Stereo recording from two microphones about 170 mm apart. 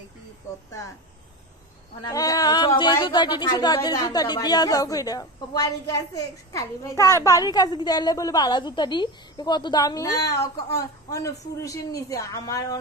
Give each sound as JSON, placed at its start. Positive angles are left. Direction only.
{"t": 2.0, "sound": "a woman's voice", "side_deg": 20}